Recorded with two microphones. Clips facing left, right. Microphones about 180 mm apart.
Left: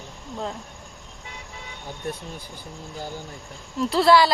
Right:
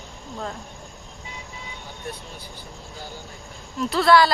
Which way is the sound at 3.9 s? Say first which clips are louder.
Even; 25° left (ahead or behind).